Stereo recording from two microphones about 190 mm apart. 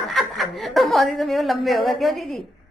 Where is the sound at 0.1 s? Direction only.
Centre (ahead or behind).